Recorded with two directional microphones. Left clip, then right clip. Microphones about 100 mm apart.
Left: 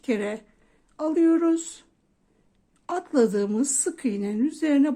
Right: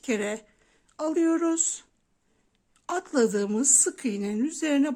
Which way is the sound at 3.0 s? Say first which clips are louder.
Left 2 dB; 30° right (ahead or behind).